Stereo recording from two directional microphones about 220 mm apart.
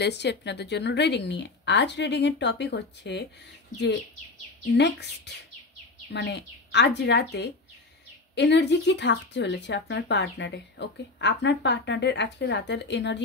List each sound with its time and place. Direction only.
0.0 s speech: 50° left (ahead or behind)
4.7 s speech: 50° left (ahead or behind)